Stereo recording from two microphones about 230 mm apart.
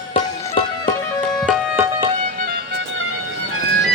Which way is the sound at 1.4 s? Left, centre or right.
Centre.